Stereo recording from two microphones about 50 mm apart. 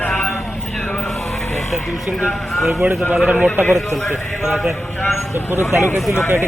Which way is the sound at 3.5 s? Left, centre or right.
Left.